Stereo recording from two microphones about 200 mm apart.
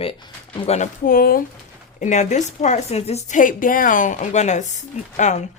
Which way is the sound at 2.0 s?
35° left (ahead or behind).